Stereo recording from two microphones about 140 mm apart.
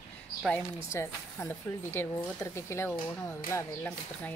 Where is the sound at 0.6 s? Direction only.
20° left (ahead or behind).